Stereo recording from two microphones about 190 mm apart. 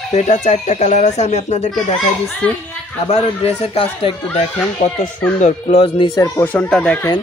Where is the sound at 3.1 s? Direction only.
30° left (ahead or behind).